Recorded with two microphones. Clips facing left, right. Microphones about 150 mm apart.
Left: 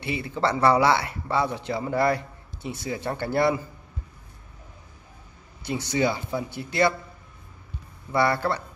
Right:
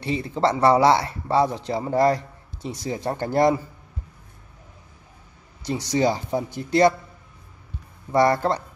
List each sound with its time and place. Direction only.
0.0 s speech: 35° right (ahead or behind)
5.7 s speech: 35° right (ahead or behind)
8.1 s speech: 40° right (ahead or behind)